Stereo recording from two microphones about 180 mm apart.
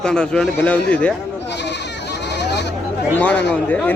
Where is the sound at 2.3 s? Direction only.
70° left (ahead or behind).